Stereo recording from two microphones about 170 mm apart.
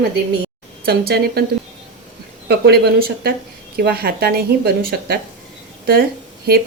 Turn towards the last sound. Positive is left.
turn(degrees=-65)  # may be behind; listen again after turning